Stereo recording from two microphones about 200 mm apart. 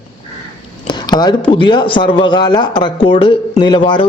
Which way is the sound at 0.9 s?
20° left (ahead or behind).